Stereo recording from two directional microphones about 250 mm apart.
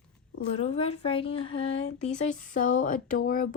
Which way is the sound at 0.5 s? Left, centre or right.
Left.